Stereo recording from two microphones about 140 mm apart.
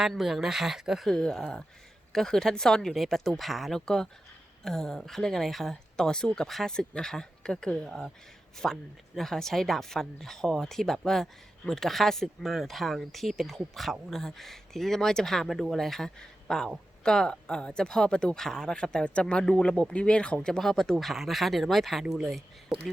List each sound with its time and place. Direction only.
0.0 s speech: centre (ahead or behind)